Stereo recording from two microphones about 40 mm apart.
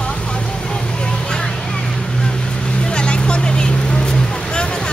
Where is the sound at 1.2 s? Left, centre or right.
Centre.